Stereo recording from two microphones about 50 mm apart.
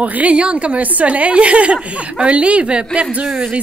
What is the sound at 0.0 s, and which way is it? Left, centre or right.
A woman's voice, right.